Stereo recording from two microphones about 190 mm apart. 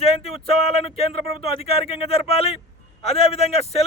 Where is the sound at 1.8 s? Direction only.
30° left (ahead or behind).